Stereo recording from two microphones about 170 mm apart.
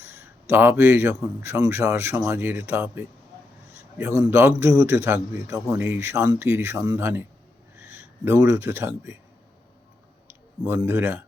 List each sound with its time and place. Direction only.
0.0 s a man's voice: 15° right (ahead or behind)
10.2 s clicking: 10° right (ahead or behind)
10.8 s a man's voice: 10° right (ahead or behind)